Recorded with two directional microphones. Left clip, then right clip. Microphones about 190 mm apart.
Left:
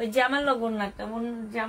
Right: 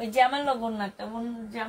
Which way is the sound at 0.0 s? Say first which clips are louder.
Right 1 dB; 35° left (ahead or behind).